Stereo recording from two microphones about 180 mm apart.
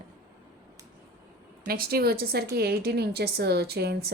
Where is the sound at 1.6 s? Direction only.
55° right (ahead or behind).